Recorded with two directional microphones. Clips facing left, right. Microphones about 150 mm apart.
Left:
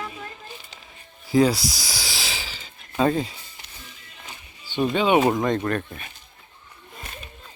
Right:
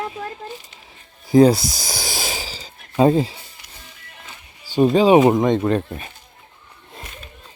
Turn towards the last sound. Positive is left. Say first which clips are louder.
# right 6 dB
turn(degrees=-30)  # may be behind; listen again after turning